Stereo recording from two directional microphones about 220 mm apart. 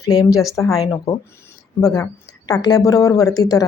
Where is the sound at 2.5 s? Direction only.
15° left (ahead or behind).